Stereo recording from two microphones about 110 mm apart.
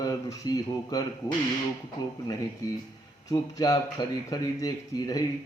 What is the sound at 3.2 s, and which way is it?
A man's voice, 35° left (ahead or behind).